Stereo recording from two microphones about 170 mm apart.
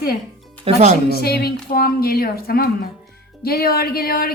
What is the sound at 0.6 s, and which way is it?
Speech, 45° right (ahead or behind).